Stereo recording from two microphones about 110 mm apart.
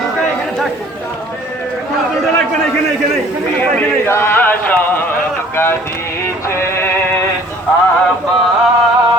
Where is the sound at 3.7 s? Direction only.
20° left (ahead or behind).